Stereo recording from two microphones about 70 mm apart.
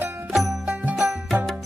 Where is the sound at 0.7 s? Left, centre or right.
Right.